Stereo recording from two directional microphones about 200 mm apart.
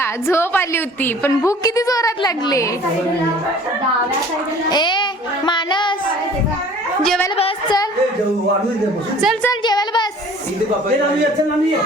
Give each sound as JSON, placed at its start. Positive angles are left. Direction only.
{"t": 0.0, "sound": "a woman's voice", "side_deg": 15}
{"t": 4.7, "sound": "speech", "side_deg": 20}
{"t": 5.5, "sound": "child singing", "side_deg": 25}
{"t": 7.3, "sound": "speech", "side_deg": 25}
{"t": 9.2, "sound": "a woman's voice", "side_deg": 0}
{"t": 9.5, "sound": "speech", "side_deg": 20}